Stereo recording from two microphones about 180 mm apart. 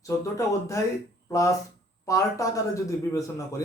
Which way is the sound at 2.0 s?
20° left (ahead or behind).